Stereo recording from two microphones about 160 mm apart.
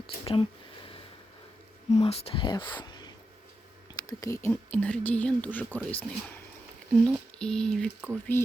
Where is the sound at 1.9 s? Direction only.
40° left (ahead or behind); by 7.8 s 5° left (ahead or behind).